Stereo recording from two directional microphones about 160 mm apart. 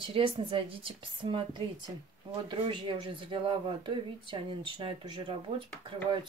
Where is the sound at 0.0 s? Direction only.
35° right (ahead or behind).